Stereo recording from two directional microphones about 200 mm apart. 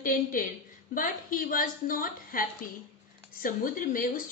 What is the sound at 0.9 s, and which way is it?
A woman's voice, 45° left (ahead or behind).